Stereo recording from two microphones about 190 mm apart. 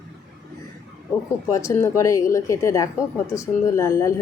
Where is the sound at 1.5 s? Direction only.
15° left (ahead or behind).